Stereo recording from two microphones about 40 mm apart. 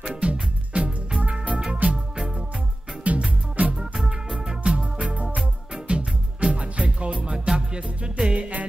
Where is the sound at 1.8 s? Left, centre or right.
Right.